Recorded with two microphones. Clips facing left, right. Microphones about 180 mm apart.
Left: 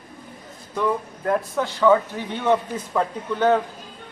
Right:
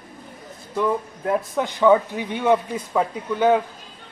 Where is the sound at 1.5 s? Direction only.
15° right (ahead or behind).